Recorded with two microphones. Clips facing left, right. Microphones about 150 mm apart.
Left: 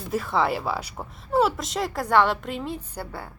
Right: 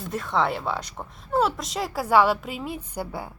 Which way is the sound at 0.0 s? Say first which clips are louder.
Left 1 dB; 5° left (ahead or behind).